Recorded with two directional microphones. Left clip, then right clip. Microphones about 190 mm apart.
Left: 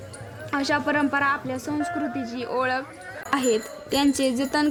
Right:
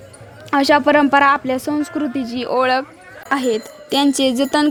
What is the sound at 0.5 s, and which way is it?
A woman's voice, 50° right (ahead or behind).